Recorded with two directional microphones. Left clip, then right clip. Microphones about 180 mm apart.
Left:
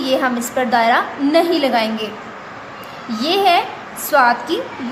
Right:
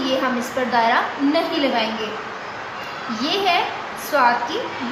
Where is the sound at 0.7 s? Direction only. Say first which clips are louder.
Left 3 dB; 55° left (ahead or behind).